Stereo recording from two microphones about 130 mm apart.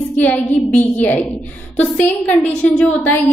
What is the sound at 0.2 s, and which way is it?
A woman's voice, 10° left (ahead or behind).